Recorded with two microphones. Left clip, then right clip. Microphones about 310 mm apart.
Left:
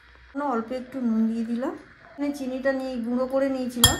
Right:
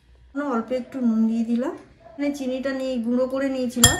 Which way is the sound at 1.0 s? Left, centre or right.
Centre.